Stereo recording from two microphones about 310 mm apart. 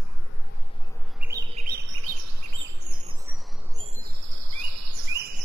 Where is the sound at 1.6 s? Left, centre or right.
Right.